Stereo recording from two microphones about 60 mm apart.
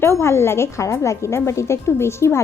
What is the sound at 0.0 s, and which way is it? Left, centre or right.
A woman's voice, left.